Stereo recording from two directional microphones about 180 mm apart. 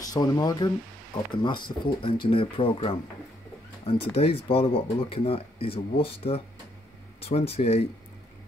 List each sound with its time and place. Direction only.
0.0 s speech: 20° left (ahead or behind)